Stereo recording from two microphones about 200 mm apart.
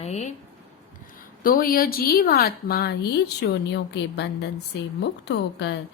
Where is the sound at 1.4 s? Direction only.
45° left (ahead or behind).